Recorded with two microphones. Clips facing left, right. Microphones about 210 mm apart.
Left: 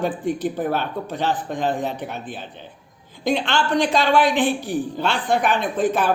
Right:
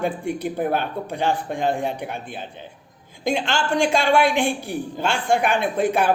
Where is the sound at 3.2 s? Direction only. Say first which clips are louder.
Left 2 dB; 45° right (ahead or behind).